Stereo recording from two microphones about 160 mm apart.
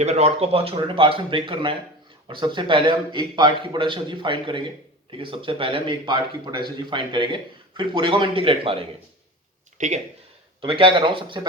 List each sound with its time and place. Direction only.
0.0 s a man's voice: 45° right (ahead or behind)
9.7 s speech: 50° right (ahead or behind)
10.6 s a man's voice: 30° right (ahead or behind)